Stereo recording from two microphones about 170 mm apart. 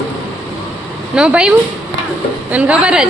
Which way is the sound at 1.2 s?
5° right (ahead or behind).